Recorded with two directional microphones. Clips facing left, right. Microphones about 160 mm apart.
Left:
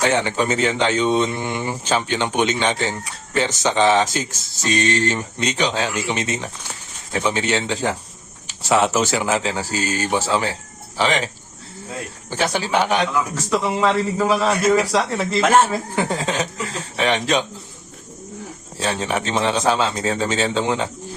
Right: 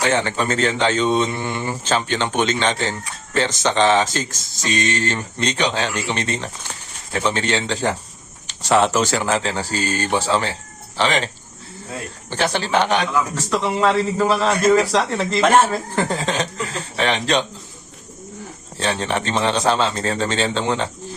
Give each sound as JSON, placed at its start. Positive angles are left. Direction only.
{"t": 0.0, "sound": "speech", "side_deg": 10}
{"t": 12.3, "sound": "speech", "side_deg": 10}
{"t": 18.8, "sound": "speech", "side_deg": 5}